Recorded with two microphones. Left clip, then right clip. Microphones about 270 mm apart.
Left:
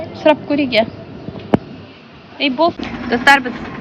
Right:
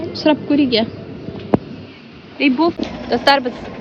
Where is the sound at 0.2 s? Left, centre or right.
Centre.